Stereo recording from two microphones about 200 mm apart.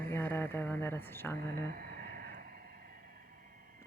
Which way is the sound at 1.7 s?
45° right (ahead or behind).